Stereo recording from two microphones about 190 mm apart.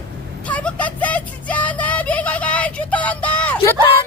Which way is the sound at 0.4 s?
5° left (ahead or behind).